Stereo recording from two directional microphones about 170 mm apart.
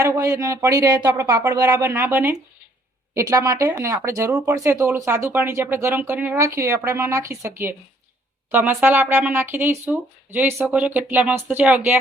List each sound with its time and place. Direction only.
0.0 s speech: 20° right (ahead or behind)